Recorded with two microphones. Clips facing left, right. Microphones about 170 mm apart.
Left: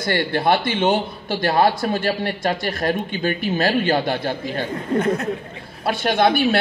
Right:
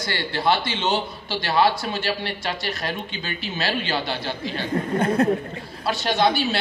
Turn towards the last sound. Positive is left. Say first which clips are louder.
# left 4 dB
turn(degrees=55)  # may be behind; listen again after turning